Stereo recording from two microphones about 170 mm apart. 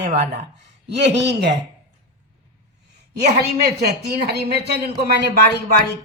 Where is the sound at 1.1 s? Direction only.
90° right.